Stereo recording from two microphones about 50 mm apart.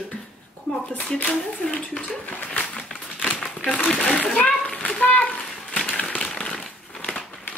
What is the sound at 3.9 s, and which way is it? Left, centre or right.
Speech, left.